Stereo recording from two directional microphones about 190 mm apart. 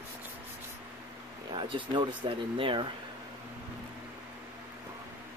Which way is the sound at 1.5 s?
25° right (ahead or behind).